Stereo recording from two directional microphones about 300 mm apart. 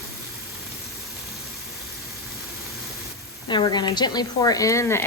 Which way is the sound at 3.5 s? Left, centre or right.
Centre.